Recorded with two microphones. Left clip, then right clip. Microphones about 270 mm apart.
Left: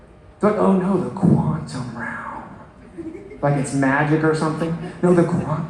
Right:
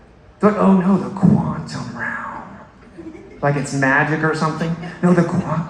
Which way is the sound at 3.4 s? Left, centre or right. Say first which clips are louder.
Right 2 dB; right.